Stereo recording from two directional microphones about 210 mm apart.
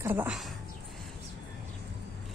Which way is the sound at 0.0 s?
10° right (ahead or behind).